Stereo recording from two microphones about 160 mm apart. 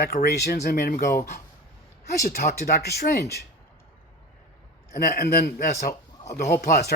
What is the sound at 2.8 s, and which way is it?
Speech, 85° left.